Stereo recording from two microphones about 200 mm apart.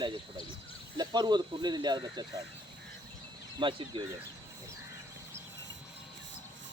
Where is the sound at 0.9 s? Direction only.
20° right (ahead or behind).